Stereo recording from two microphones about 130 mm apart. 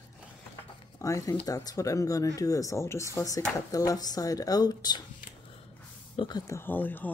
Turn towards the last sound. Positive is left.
turn(degrees=15)  # may be behind; listen again after turning